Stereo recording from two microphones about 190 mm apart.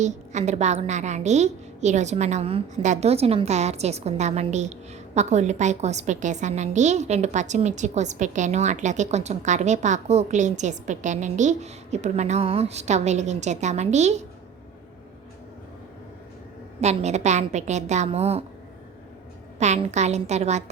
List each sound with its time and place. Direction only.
0.0 s a woman's voice: 35° right (ahead or behind)
16.8 s a woman's voice: 35° right (ahead or behind)
19.5 s a woman's voice: 35° right (ahead or behind)